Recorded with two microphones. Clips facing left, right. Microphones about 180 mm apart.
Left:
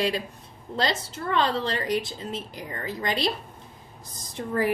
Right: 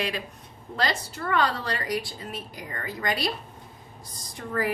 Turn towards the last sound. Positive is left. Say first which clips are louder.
# left 3 dB
turn(degrees=25)  # may be behind; listen again after turning